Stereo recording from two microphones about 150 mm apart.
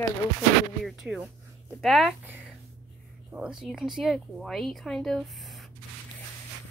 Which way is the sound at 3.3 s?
5° right (ahead or behind).